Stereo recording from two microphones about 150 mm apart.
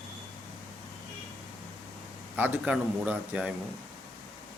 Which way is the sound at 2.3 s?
10° right (ahead or behind).